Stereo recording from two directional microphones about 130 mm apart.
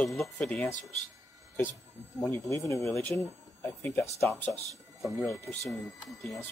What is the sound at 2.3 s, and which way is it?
Speech, 20° left (ahead or behind).